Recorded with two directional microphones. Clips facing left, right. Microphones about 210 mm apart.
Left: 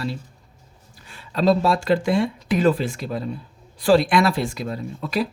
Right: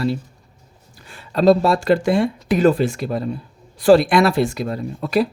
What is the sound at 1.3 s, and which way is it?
Speech, 45° right (ahead or behind).